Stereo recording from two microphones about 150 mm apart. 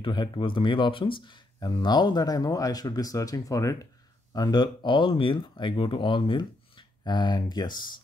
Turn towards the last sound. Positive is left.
turn(degrees=30)  # may be behind; listen again after turning